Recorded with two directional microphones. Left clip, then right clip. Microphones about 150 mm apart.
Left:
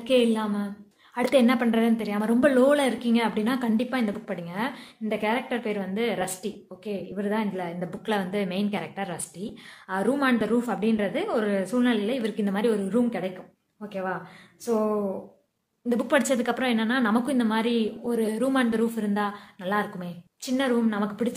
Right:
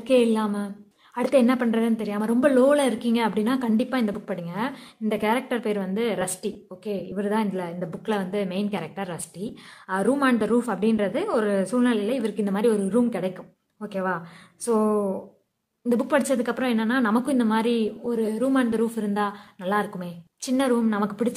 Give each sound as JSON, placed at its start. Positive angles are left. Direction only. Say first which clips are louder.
{"t": 0.0, "sound": "speech", "louder": "right 2 dB", "side_deg": -30}
{"t": 1.1, "sound": "a woman's voice", "louder": "right 1 dB", "side_deg": -25}
{"t": 15.9, "sound": "speech", "louder": "right 1 dB", "side_deg": -25}